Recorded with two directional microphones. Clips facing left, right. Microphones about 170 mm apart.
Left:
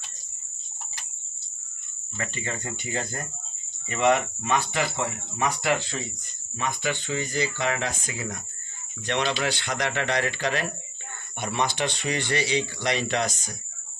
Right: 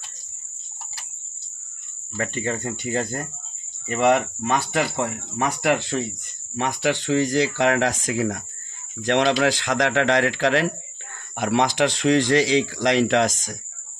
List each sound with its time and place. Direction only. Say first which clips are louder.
2.1 s speech: right 7 dB; 45° right (ahead or behind)
6.5 s speech: right 6 dB; 70° right (ahead or behind); by 13.6 s 90° right